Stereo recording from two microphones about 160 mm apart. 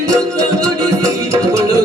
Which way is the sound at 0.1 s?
20° right (ahead or behind).